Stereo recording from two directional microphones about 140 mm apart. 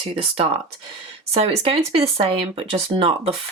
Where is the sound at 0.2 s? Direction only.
45° right (ahead or behind).